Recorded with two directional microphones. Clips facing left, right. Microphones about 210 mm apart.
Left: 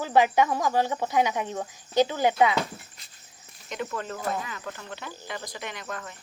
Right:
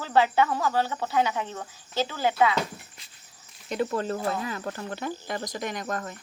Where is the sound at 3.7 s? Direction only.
35° right (ahead or behind).